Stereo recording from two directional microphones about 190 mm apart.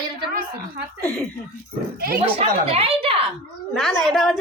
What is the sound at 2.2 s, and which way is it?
Speech, 30° right (ahead or behind).